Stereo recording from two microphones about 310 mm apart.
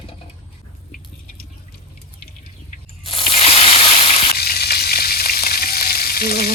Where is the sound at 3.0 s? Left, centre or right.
Centre.